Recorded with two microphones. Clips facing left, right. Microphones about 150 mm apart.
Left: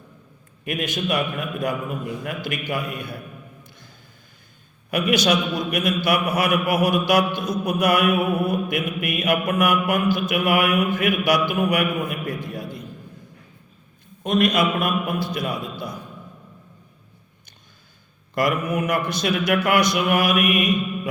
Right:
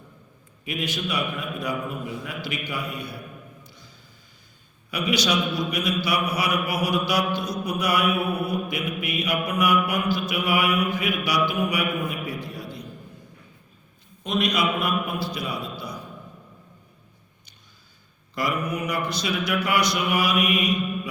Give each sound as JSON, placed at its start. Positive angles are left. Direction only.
{"t": 0.6, "sound": "mantra", "side_deg": 50}
{"t": 2.2, "sound": "mantra", "side_deg": 50}
{"t": 3.6, "sound": "music", "side_deg": 55}
{"t": 4.9, "sound": "mantra", "side_deg": 50}
{"t": 14.3, "sound": "mantra", "side_deg": 50}
{"t": 18.3, "sound": "mantra", "side_deg": 50}